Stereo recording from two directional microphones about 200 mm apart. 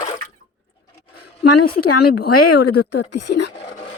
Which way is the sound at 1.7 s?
50° left (ahead or behind).